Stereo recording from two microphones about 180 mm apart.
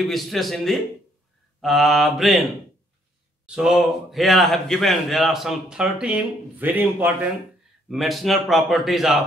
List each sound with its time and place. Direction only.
0.1 s a man's voice: centre (ahead or behind)
3.4 s a man's voice: 5° right (ahead or behind)
7.9 s a man's voice: centre (ahead or behind)